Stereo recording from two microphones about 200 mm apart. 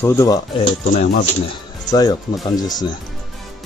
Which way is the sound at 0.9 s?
40° left (ahead or behind).